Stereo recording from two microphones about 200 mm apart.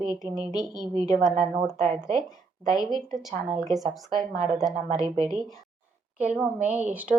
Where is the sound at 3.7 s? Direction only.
Centre (ahead or behind).